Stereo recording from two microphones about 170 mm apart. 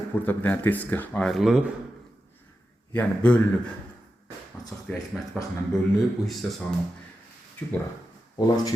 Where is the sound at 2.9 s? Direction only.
10° left (ahead or behind).